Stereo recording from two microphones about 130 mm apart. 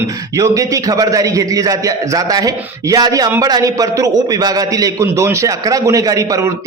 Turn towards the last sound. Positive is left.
turn(degrees=-25)  # may be behind; listen again after turning